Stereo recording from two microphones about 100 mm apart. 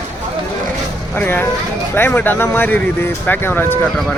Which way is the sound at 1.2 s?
20° left (ahead or behind).